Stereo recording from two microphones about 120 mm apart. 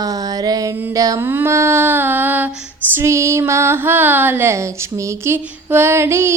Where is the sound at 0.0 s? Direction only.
30° right (ahead or behind).